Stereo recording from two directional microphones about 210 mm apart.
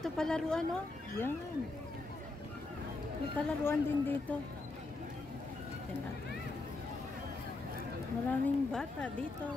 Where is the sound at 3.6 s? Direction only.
10° left (ahead or behind).